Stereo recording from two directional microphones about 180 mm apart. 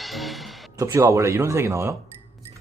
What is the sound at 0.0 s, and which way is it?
Music, centre (ahead or behind).